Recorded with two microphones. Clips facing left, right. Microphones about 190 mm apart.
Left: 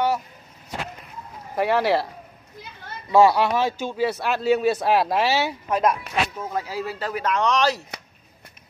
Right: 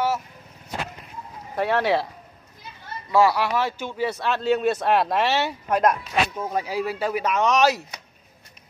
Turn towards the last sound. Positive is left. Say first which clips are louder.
# right 2 dB
turn(degrees=-5)  # may be behind; listen again after turning